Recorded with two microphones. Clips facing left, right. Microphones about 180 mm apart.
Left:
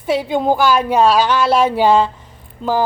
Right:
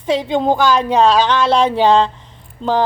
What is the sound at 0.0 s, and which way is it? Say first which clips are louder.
A woman's voice: right 1 dB; 10° left (ahead or behind).